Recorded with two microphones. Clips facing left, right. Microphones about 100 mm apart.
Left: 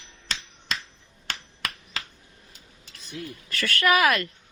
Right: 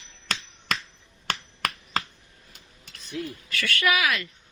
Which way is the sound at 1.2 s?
50° right (ahead or behind).